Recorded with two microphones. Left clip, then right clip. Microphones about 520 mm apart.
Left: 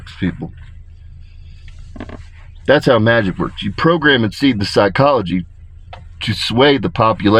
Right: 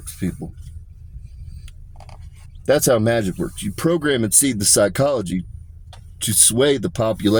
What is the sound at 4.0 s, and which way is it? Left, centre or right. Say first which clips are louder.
Speech: left 6 dB; centre.